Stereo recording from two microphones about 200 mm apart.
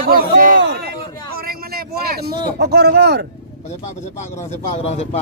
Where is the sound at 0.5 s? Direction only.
60° right (ahead or behind).